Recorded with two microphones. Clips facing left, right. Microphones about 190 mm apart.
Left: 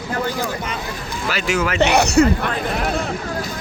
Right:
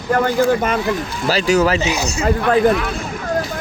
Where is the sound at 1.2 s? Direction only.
35° right (ahead or behind).